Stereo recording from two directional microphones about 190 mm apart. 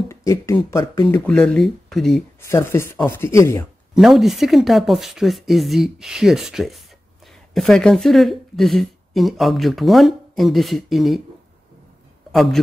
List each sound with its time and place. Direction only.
0.1 s speech: 15° left (ahead or behind)
2.4 s speech: 15° left (ahead or behind)
3.9 s speech: centre (ahead or behind)
12.3 s speech: centre (ahead or behind)